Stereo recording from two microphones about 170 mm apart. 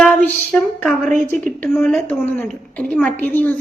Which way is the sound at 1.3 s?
50° right (ahead or behind).